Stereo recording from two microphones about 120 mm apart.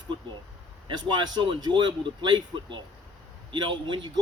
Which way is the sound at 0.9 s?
40° right (ahead or behind).